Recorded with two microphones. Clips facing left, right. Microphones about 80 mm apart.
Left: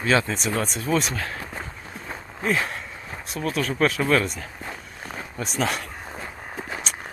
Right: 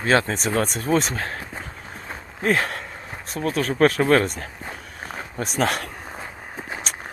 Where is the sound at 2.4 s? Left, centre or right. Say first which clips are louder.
Right 3 dB; right.